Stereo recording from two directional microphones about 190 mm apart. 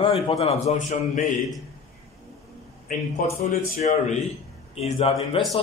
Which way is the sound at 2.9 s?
45° left (ahead or behind).